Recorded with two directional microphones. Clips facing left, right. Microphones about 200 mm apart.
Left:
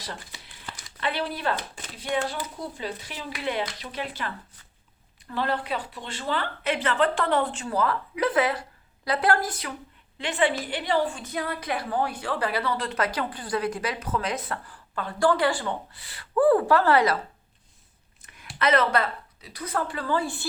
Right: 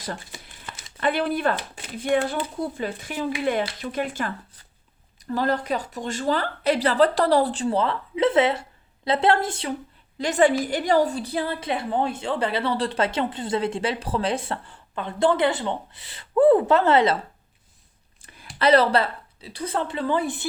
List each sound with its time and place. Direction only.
0.0 s crumpling: 50° right (ahead or behind)
0.9 s speech: 50° right (ahead or behind)
5.3 s a woman's voice: 40° right (ahead or behind)
10.2 s a woman's voice: 40° right (ahead or behind); by 17.2 s 25° right (ahead or behind)
18.2 s a sound: 30° right (ahead or behind)
18.6 s a woman's voice: 30° right (ahead or behind)